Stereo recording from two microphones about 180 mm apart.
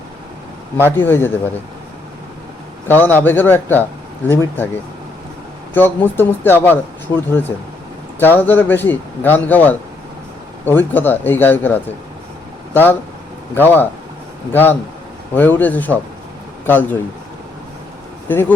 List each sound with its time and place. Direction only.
0.9 s speech: 10° left (ahead or behind)
2.8 s speech: 10° left (ahead or behind)
5.7 s speech: 10° left (ahead or behind)
18.3 s speech: 10° left (ahead or behind)